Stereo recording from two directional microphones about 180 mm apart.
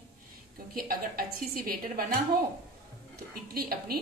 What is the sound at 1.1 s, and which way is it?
Speech, 55° right (ahead or behind).